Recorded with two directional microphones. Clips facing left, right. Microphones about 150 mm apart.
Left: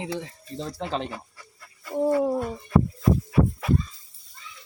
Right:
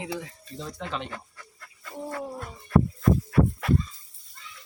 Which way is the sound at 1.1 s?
10° left (ahead or behind).